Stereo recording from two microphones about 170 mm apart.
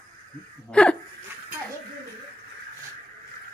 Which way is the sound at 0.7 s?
5° left (ahead or behind).